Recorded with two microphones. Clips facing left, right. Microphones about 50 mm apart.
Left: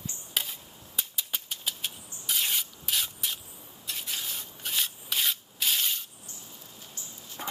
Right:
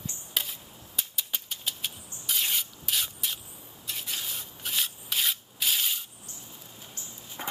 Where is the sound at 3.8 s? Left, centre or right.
Centre.